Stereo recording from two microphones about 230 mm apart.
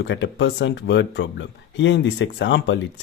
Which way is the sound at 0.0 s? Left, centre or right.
Left.